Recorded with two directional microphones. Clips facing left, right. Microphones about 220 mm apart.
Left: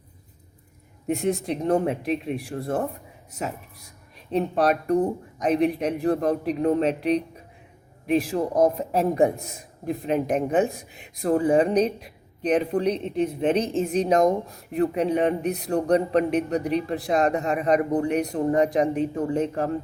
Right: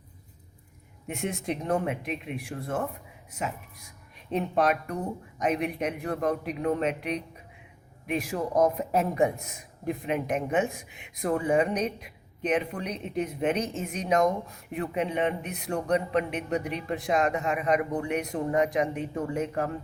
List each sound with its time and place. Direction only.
1.0 s a man's voice: 35° left (ahead or behind)